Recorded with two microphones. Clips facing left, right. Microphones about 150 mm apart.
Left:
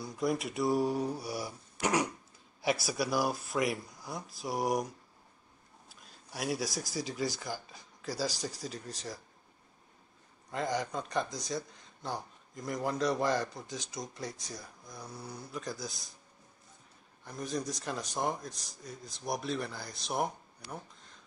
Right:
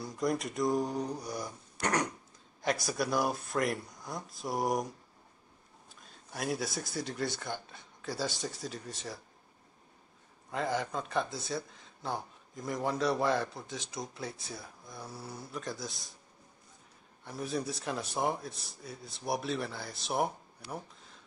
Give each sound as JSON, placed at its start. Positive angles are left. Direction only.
{"t": 0.0, "sound": "speech", "side_deg": 0}
{"t": 10.5, "sound": "speech", "side_deg": 0}
{"t": 17.2, "sound": "speech", "side_deg": -5}